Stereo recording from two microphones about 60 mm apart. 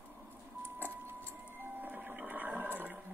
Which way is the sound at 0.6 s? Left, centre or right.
Right.